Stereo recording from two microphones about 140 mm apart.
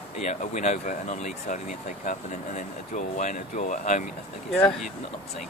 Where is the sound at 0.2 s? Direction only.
55° left (ahead or behind).